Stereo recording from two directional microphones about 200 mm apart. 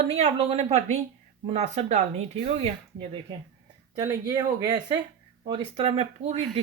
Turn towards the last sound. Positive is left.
turn(degrees=-30)  # may be behind; listen again after turning